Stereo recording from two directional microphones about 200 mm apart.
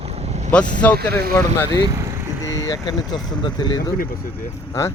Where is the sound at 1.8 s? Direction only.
15° right (ahead or behind).